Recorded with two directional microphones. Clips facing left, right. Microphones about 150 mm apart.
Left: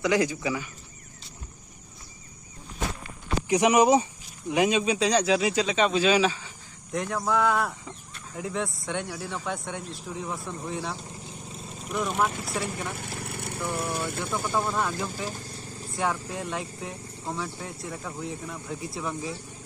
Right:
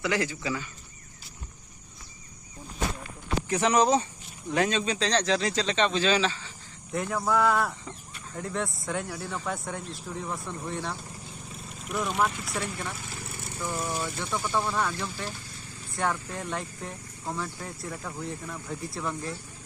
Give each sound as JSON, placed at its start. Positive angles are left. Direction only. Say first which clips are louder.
{"t": 0.0, "sound": "speech", "louder": "left 4 dB", "side_deg": 15}
{"t": 3.5, "sound": "speech", "louder": "left 4 dB", "side_deg": 10}
{"t": 6.9, "sound": "speech", "louder": "even", "side_deg": 0}
{"t": 13.0, "sound": "vehicle", "louder": "left 4 dB", "side_deg": 60}
{"t": 14.4, "sound": "speech", "louder": "even", "side_deg": 0}
{"t": 15.3, "sound": "vehicle", "louder": "left 4 dB", "side_deg": 40}
{"t": 16.0, "sound": "speech", "louder": "left 1 dB", "side_deg": 5}